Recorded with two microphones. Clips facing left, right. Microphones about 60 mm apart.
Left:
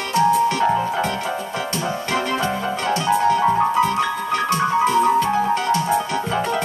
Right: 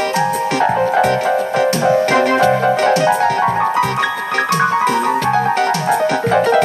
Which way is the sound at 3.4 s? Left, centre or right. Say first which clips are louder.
Right 2 dB; right.